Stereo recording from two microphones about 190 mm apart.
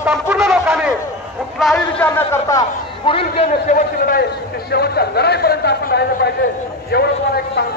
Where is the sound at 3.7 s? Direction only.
50° left (ahead or behind).